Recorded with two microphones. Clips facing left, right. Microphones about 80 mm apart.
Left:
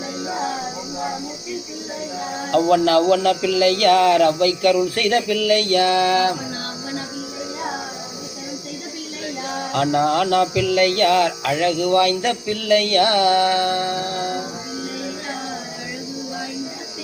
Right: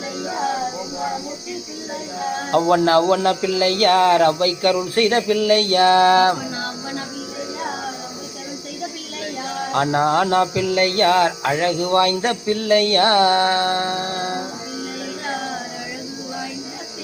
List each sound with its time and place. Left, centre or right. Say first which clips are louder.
2.5 s cricket: even; right
9.7 s cricket: right 1 dB; right